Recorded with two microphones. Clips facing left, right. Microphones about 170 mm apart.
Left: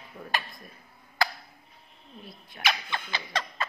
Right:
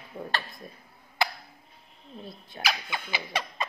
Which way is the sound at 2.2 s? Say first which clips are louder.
Right 4 dB; 25° right (ahead or behind).